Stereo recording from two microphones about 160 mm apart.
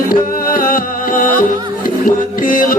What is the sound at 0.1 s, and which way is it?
Music, 60° left (ahead or behind).